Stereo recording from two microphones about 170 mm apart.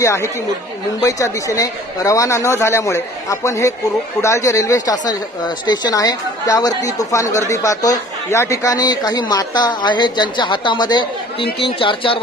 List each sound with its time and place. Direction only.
0.0 s speech: 15° left (ahead or behind)